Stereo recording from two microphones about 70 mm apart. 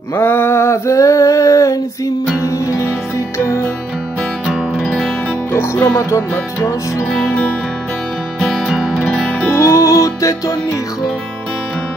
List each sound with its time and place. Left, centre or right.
0.1 s a sound: left
2.4 s music: left
4.5 s music: centre
5.9 s music: left
7.1 s music: centre
9.0 s music: centre
9.6 s music: left